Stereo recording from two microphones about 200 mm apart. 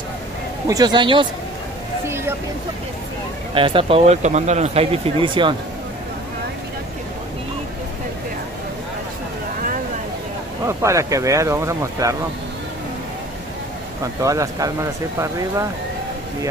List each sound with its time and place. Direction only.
0.7 s speech: 20° right (ahead or behind)
2.0 s a sound: 10° right (ahead or behind)
3.5 s speech: 25° right (ahead or behind)
10.7 s speech: 15° right (ahead or behind)
14.2 s speech: 15° right (ahead or behind)